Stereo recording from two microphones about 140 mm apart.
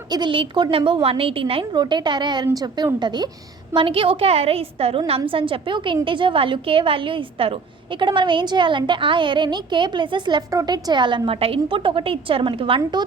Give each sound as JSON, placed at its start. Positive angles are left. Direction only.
{"t": 0.1, "sound": "a woman's voice", "side_deg": -35}